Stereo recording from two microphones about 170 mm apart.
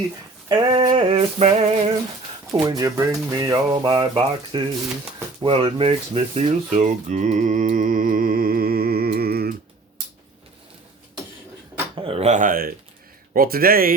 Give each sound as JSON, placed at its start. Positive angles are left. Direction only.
{"t": 0.4, "sound": "speech", "side_deg": -25}
{"t": 2.5, "sound": "speech", "side_deg": -20}
{"t": 11.9, "sound": "speech", "side_deg": -30}
{"t": 12.3, "sound": "speech", "side_deg": -50}